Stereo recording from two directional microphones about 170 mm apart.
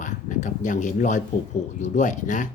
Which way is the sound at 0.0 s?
45° left (ahead or behind).